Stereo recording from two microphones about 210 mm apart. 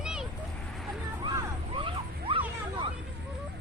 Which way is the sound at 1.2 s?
20° right (ahead or behind).